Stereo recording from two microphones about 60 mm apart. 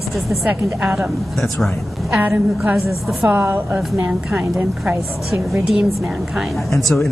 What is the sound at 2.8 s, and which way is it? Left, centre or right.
Speech, centre.